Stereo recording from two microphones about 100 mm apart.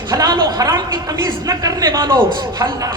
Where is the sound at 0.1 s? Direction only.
40° right (ahead or behind).